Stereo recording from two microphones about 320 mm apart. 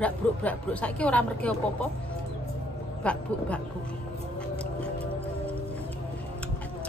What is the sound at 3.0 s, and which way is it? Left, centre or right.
Speech, centre.